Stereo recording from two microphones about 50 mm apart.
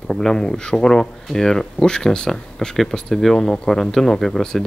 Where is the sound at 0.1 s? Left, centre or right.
Centre.